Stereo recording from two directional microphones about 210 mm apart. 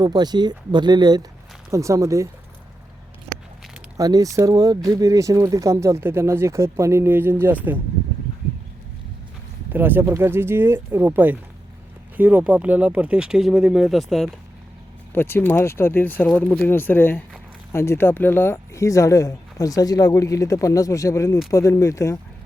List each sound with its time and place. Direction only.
0.0 s speech: 20° right (ahead or behind)
3.9 s speech: 15° right (ahead or behind)
9.7 s speech: 10° right (ahead or behind)
15.1 s speech: 10° left (ahead or behind)